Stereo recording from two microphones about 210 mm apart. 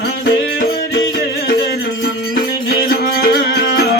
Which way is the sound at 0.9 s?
70° left (ahead or behind).